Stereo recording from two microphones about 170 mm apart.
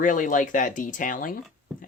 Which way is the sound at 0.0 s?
50° left (ahead or behind).